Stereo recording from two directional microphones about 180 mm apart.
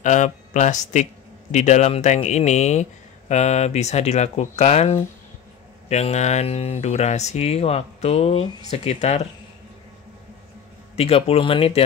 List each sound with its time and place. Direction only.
0.0 s speech: 45° left (ahead or behind)
11.0 s speech: 35° left (ahead or behind)